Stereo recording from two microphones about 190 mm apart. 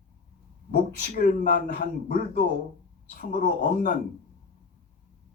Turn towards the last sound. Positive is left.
turn(degrees=45)  # may be behind; listen again after turning